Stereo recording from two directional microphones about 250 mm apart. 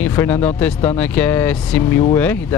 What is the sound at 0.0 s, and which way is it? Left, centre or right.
Speech, centre.